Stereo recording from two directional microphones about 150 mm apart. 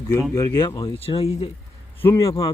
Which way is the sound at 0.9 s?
40° left (ahead or behind).